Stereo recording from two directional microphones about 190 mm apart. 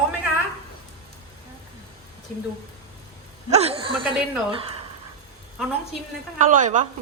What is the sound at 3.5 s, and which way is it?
Speech, 30° right (ahead or behind).